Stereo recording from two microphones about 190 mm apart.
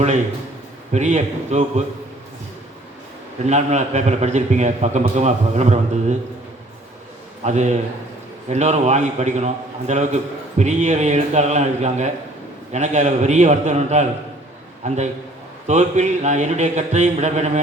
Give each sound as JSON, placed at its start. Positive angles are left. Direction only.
{"t": 0.9, "sound": "a man's voice", "side_deg": -35}
{"t": 3.4, "sound": "a man's voice", "side_deg": -35}
{"t": 7.4, "sound": "a man's voice", "side_deg": -35}